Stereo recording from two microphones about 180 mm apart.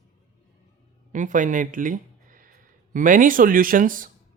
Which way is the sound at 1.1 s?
45° right (ahead or behind).